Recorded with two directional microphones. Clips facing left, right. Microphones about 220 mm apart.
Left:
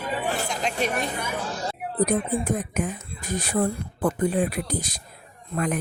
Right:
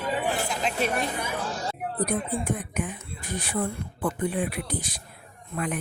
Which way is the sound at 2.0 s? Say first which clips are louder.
Left 5 dB; 40° left (ahead or behind).